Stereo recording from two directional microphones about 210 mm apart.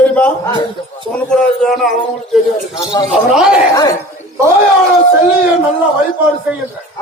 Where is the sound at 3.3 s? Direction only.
5° right (ahead or behind).